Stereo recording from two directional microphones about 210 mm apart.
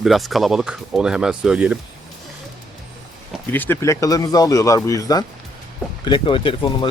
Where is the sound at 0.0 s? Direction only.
Centre (ahead or behind).